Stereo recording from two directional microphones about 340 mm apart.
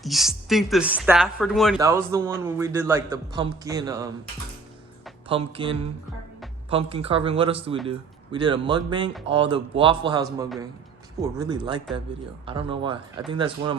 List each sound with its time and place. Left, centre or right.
0.0 s a man's voice: centre
5.3 s a man's voice: centre